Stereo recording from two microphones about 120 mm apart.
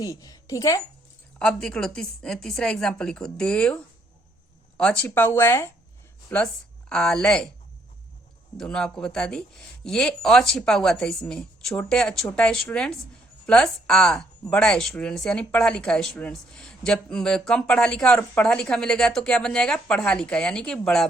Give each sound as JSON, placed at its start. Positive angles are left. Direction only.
{"t": 0.0, "sound": "a woman's voice", "side_deg": 30}
{"t": 1.4, "sound": "speech", "side_deg": 5}
{"t": 4.8, "sound": "a woman's voice", "side_deg": 10}
{"t": 8.5, "sound": "a woman's voice", "side_deg": 5}